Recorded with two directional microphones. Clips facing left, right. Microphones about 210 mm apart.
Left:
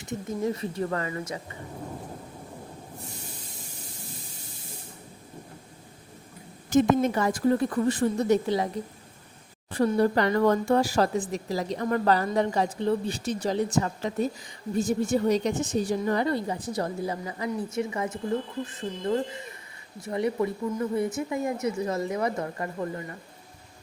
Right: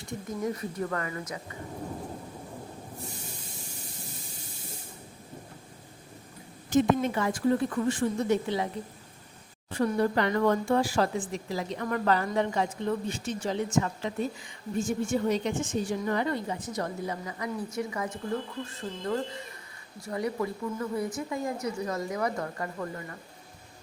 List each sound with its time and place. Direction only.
0.0 s speech: 25° left (ahead or behind)
6.7 s speech: 45° left (ahead or behind)
9.7 s speech: 35° left (ahead or behind)